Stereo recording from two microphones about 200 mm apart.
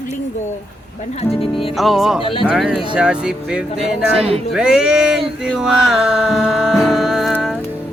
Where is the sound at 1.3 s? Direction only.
30° left (ahead or behind).